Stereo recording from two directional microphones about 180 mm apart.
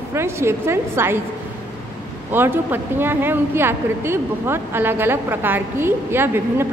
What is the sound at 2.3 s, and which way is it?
A woman's voice, 10° right (ahead or behind).